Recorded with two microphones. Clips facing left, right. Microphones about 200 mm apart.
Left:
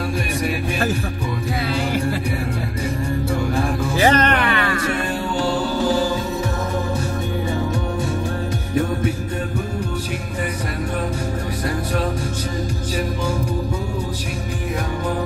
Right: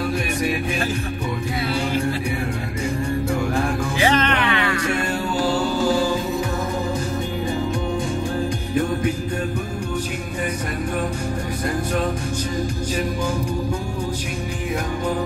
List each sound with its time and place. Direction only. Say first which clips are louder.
4.0 s music: left 3 dB; 45° left (ahead or behind)